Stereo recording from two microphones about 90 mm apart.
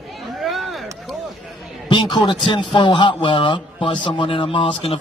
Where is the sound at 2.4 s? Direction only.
65° left (ahead or behind).